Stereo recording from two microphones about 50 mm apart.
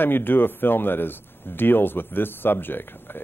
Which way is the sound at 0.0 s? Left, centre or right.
Left.